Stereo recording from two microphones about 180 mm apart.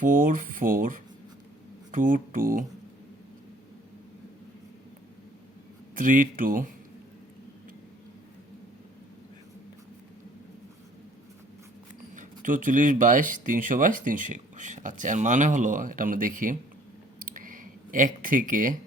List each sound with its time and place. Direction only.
0.0 s speech: 50° right (ahead or behind)
6.0 s speech: 45° right (ahead or behind)
12.1 s speech: 45° right (ahead or behind)
17.2 s a sound: 50° right (ahead or behind)